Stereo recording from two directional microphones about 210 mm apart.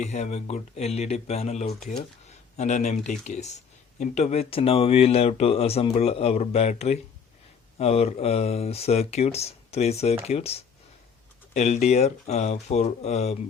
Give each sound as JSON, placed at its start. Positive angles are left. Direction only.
{"t": 0.0, "sound": "speech", "side_deg": 30}